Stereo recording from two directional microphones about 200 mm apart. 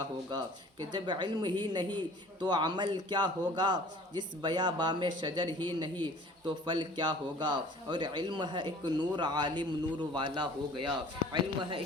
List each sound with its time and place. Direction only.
0.0 s speech: 20° right (ahead or behind)